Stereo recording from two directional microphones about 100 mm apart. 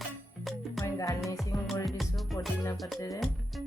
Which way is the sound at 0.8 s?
30° left (ahead or behind).